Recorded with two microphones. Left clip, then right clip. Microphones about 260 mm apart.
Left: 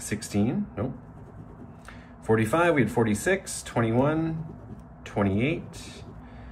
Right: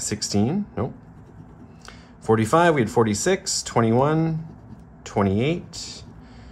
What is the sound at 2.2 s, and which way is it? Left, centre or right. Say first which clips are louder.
Speech: right 5 dB; right.